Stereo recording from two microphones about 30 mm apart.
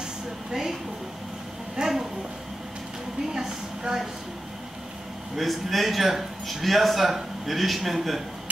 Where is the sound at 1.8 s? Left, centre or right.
Right.